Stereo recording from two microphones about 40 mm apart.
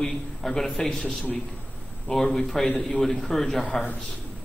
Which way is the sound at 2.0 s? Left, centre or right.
Centre.